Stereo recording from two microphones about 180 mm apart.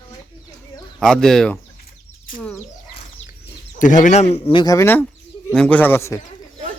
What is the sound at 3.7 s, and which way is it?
Speech, 45° left (ahead or behind).